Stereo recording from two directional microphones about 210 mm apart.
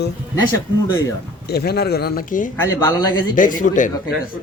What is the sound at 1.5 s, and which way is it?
A man's voice, 50° left (ahead or behind).